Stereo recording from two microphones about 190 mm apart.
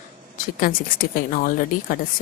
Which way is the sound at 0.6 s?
45° left (ahead or behind).